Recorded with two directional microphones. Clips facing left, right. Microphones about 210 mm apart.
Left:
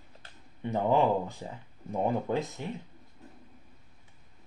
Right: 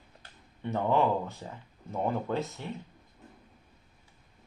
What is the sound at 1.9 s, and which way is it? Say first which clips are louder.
Speech: left 2 dB; 15° left (ahead or behind).